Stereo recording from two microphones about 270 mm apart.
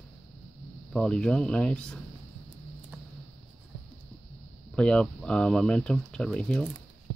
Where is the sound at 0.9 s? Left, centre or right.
Centre.